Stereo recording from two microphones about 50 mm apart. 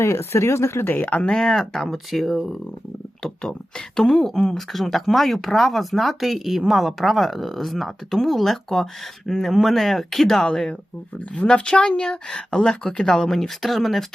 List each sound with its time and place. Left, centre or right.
0.0 s speech: left
0.9 s speech: left
1.2 s speech: centre
3.9 s speech: centre
10.4 s speech: centre